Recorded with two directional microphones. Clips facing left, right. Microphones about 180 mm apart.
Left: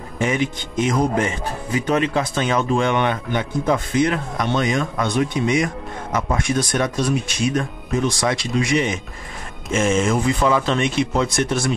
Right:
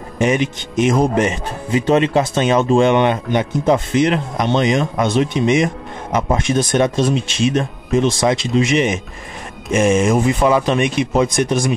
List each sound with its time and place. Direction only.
0.2 s speech: 20° right (ahead or behind)